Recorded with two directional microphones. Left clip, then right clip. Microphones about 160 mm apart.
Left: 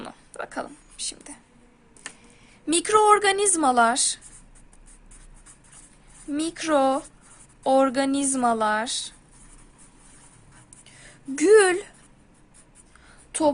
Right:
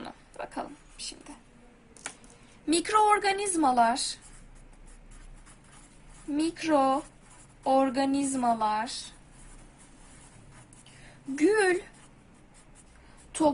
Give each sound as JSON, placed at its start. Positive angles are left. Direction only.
{"t": 0.0, "sound": "a sound", "side_deg": 50}
{"t": 2.6, "sound": "a woman's voice", "side_deg": 45}
{"t": 6.3, "sound": "a woman's voice", "side_deg": 65}
{"t": 11.3, "sound": "a woman's voice", "side_deg": 65}